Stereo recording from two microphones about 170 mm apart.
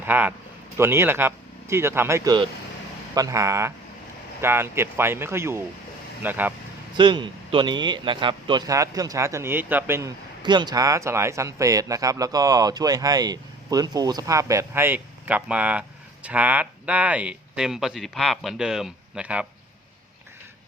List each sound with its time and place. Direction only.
0.0 s speech: 10° right (ahead or behind)
6.9 s speech: 30° right (ahead or behind)
10.4 s speech: 25° right (ahead or behind); by 19.5 s 5° right (ahead or behind)